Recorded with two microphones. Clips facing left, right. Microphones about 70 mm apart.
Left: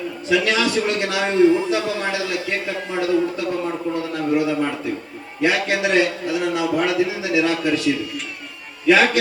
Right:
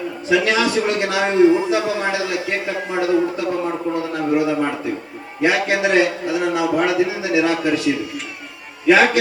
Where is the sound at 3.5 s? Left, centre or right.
Right.